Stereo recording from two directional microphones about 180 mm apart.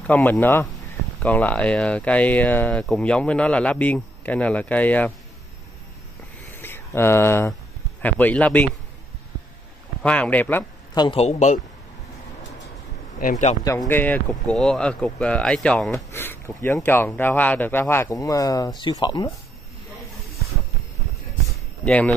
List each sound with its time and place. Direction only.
0.0 s speech: 10° left (ahead or behind)
6.5 s a sound: 10° left (ahead or behind)
8.0 s speech: 10° left (ahead or behind)
10.0 s speech: 5° left (ahead or behind)
11.0 s a man's voice: 30° left (ahead or behind)
13.2 s speech: 40° left (ahead or behind)
13.7 s speech: 15° left (ahead or behind)
21.8 s speech: 5° left (ahead or behind)